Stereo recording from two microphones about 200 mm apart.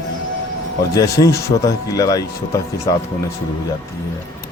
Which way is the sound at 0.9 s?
15° left (ahead or behind).